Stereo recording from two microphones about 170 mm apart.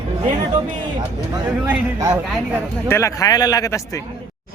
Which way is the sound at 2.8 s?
15° left (ahead or behind).